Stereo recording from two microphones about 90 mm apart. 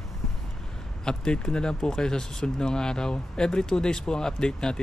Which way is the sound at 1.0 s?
10° left (ahead or behind).